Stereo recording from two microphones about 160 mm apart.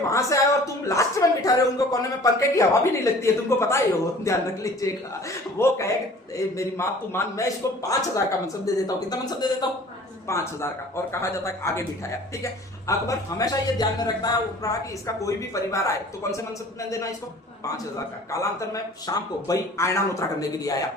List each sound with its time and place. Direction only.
0.1 s a man's voice: 20° left (ahead or behind)
17.7 s speech: 20° left (ahead or behind)